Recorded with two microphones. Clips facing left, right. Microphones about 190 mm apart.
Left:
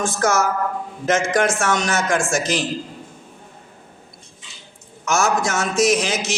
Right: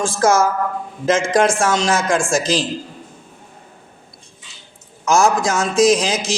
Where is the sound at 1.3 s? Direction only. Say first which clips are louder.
Right 3 dB; 30° right (ahead or behind).